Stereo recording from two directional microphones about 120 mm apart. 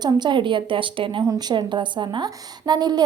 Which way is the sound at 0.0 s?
40° right (ahead or behind).